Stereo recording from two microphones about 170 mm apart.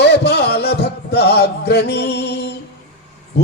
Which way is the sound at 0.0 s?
75° left (ahead or behind).